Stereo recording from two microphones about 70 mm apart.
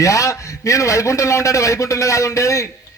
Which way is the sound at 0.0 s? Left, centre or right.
Left.